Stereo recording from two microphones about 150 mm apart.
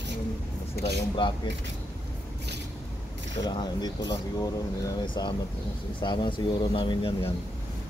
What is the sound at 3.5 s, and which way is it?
Speech, 30° left (ahead or behind).